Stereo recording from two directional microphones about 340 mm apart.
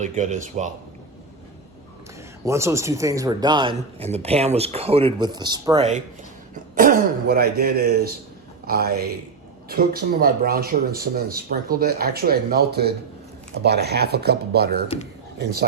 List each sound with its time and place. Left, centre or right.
0.0 s speech: right
2.4 s speech: centre; by 14.8 s right